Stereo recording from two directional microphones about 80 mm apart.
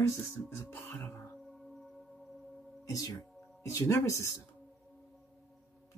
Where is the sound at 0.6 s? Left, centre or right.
Left.